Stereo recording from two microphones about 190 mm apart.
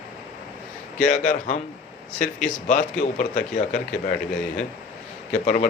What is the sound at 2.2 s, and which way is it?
Speech, 5° left (ahead or behind).